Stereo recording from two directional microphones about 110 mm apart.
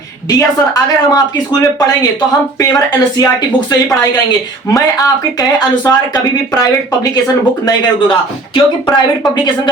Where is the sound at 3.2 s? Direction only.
35° left (ahead or behind).